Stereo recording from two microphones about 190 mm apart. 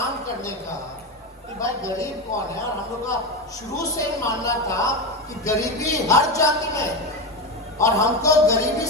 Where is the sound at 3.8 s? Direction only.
15° left (ahead or behind).